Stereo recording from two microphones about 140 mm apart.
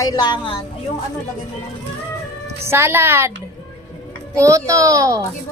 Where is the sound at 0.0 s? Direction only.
30° left (ahead or behind).